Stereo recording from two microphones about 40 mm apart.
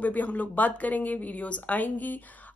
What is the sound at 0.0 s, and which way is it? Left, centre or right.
Speech, left.